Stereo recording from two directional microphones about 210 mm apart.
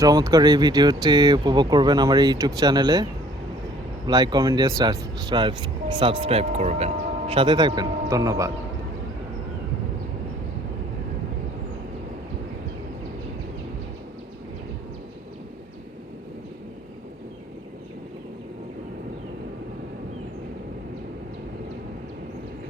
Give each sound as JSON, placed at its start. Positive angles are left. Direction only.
{"t": 0.0, "sound": "speech", "side_deg": -15}